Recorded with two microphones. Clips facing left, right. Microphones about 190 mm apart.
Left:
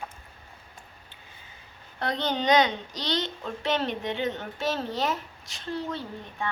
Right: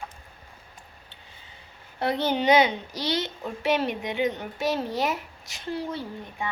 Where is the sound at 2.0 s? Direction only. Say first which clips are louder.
Right 3 dB; 10° right (ahead or behind).